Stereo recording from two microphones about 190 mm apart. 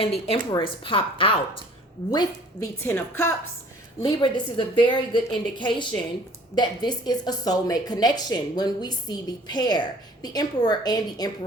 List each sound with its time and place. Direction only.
0.3 s a woman's voice: 25° left (ahead or behind)
4.0 s speech: 25° left (ahead or behind)